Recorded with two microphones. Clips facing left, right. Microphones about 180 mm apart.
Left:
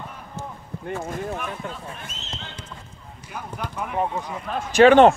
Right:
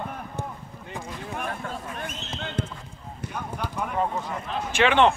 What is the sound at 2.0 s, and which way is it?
Basketball bounce, 60° right (ahead or behind).